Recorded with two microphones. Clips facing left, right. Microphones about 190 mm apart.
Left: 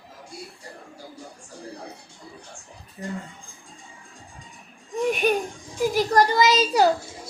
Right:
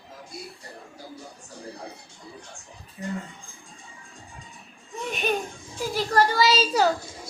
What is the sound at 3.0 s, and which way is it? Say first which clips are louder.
Speech: even; 40° left (ahead or behind).